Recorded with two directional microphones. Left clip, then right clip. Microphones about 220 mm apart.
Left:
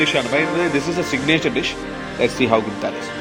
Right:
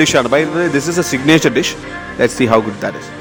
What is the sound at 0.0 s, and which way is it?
Speech, 45° right (ahead or behind).